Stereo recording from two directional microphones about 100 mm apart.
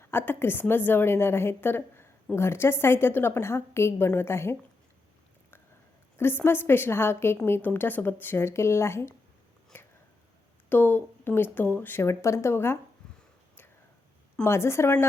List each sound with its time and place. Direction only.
0.0 s a woman's voice: 20° left (ahead or behind)
6.1 s a woman's voice: 25° left (ahead or behind)
9.7 s a sound: 20° left (ahead or behind)
10.7 s a woman's voice: 20° left (ahead or behind)
14.4 s a woman's voice: 25° left (ahead or behind)